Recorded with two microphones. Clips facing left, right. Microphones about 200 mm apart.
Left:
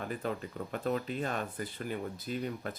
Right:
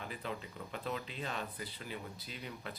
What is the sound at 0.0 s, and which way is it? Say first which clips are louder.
Speech: left 7 dB; 50° left (ahead or behind).